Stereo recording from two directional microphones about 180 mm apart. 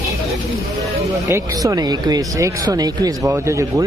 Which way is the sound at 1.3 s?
20° right (ahead or behind).